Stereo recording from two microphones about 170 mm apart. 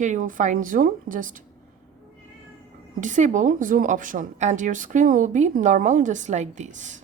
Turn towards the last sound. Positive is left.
turn(degrees=-45)  # may be behind; listen again after turning